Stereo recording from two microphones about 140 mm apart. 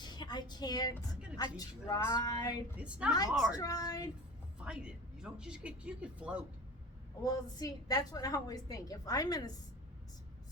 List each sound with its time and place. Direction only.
0.0 s a sound: 30° left (ahead or behind)
1.4 s a woman's voice: 25° left (ahead or behind)
2.7 s speech: 10° right (ahead or behind)
3.5 s a woman's voice: 25° left (ahead or behind)
4.6 s speech: 5° right (ahead or behind)
7.3 s a woman's voice: 25° left (ahead or behind)